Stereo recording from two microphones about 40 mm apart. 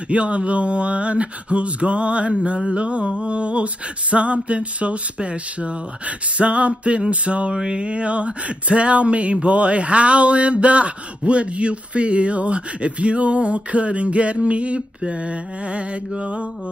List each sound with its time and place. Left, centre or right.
0.1 s speech: right